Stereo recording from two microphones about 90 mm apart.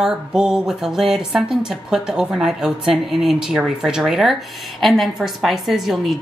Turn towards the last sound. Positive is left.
turn(degrees=0)  # may be behind; listen again after turning